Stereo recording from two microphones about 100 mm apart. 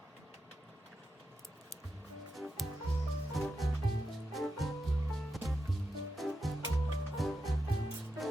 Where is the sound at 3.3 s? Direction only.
Centre (ahead or behind).